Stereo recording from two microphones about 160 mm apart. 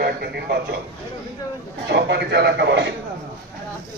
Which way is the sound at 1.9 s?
90° right.